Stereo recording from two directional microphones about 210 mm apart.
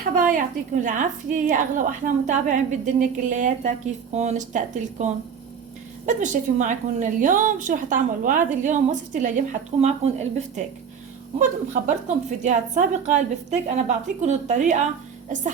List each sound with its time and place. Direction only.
0.0 s a woman's voice: 40° right (ahead or behind)